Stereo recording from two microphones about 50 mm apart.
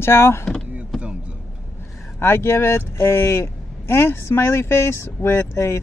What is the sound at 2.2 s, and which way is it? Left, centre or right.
Speech, left.